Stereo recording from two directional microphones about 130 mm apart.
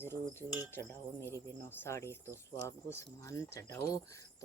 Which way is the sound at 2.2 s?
20° right (ahead or behind).